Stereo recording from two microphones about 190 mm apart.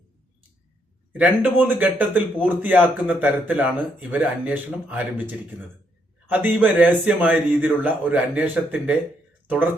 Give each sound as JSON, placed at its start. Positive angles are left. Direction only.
{"t": 1.1, "sound": "speech", "side_deg": -5}